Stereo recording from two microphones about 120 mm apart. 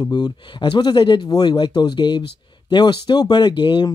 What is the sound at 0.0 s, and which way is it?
Speech, 35° left (ahead or behind).